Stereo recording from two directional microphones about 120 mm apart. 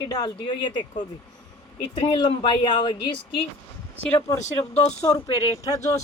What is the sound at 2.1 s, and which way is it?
Speech, 40° left (ahead or behind).